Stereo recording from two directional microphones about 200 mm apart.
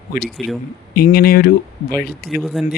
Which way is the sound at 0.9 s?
50° left (ahead or behind).